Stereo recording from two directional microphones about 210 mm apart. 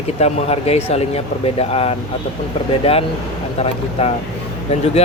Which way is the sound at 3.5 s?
30° left (ahead or behind).